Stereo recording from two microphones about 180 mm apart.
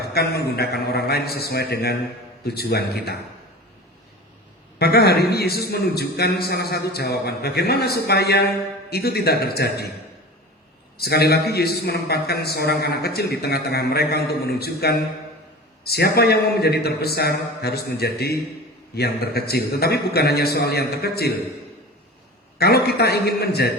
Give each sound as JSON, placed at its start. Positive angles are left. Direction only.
{"t": 0.0, "sound": "a man's voice", "side_deg": 60}
{"t": 4.8, "sound": "a man's voice", "side_deg": 60}
{"t": 10.9, "sound": "a man's voice", "side_deg": 60}
{"t": 22.5, "sound": "a man's voice", "side_deg": 60}